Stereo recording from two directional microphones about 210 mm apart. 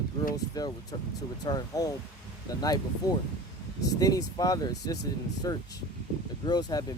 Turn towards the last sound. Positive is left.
turn(degrees=20)  # may be behind; listen again after turning